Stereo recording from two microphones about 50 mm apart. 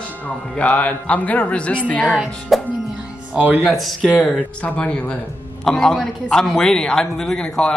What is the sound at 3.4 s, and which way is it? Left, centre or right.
Speech, right.